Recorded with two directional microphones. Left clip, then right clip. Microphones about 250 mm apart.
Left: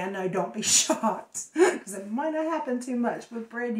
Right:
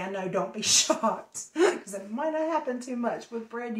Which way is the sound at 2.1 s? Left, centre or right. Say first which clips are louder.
Even; centre.